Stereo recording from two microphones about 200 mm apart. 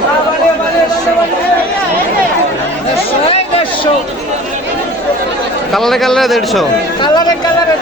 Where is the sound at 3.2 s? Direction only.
30° left (ahead or behind).